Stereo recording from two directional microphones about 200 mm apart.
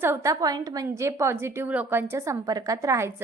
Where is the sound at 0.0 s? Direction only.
15° right (ahead or behind).